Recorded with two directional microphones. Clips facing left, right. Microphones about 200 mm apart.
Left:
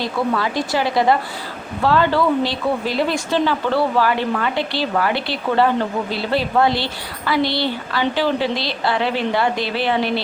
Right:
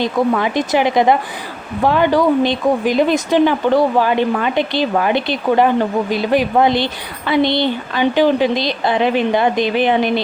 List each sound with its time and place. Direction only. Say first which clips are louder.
0.0 s speech: right 5 dB; 20° right (ahead or behind)